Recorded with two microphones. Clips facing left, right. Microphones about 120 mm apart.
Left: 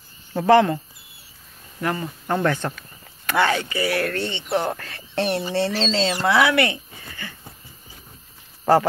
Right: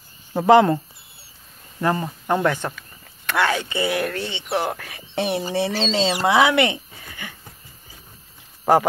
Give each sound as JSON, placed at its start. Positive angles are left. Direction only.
{"t": 0.3, "sound": "speech", "side_deg": -15}
{"t": 1.8, "sound": "speech", "side_deg": -30}
{"t": 2.2, "sound": "speech", "side_deg": -15}
{"t": 3.3, "sound": "speech", "side_deg": 0}
{"t": 3.5, "sound": "speech", "side_deg": -25}